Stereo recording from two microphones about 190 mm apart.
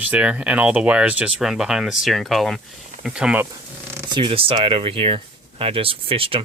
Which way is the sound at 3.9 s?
25° right (ahead or behind).